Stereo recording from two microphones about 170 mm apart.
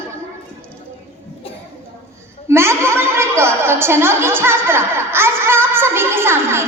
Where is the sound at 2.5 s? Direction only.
15° right (ahead or behind).